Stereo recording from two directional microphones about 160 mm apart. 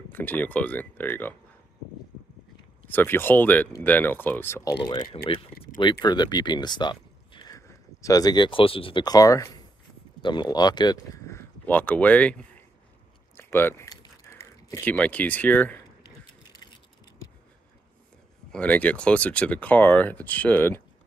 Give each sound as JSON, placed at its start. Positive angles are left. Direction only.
{"t": 0.1, "sound": "speech", "side_deg": 10}
{"t": 2.9, "sound": "speech", "side_deg": 15}
{"t": 4.8, "sound": "speech", "side_deg": 30}
{"t": 13.8, "sound": "a sound", "side_deg": 20}
{"t": 16.5, "sound": "a sound", "side_deg": 25}
{"t": 18.5, "sound": "speech", "side_deg": 10}